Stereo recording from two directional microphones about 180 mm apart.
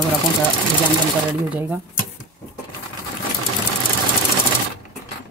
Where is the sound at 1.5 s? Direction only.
10° right (ahead or behind).